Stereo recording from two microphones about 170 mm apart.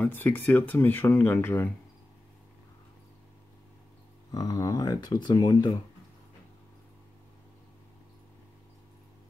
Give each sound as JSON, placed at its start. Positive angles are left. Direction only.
{"t": 0.0, "sound": "speech", "side_deg": 10}
{"t": 4.3, "sound": "speech", "side_deg": 20}